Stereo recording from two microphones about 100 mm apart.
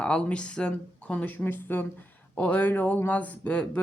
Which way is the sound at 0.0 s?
10° left (ahead or behind).